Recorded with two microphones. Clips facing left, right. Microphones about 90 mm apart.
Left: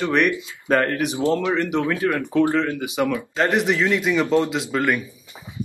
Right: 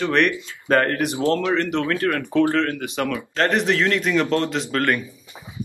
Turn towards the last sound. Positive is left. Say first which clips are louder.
# even
turn(degrees=5)  # may be behind; listen again after turning